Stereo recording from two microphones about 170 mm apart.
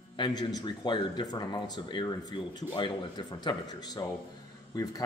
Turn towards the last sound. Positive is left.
turn(degrees=20)  # may be behind; listen again after turning